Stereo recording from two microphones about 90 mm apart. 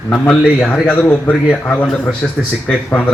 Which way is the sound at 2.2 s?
5° left (ahead or behind).